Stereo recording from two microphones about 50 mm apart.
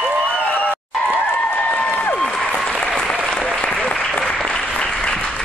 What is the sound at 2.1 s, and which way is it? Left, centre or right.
Applause, centre.